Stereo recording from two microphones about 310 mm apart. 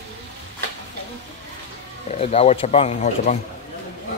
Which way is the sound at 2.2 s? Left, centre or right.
Centre.